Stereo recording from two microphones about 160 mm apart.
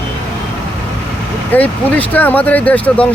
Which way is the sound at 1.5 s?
10° left (ahead or behind).